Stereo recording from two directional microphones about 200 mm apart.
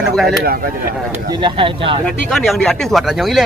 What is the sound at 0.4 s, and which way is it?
Speech, 50° right (ahead or behind).